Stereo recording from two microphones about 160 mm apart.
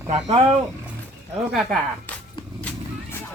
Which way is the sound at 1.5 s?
5° left (ahead or behind).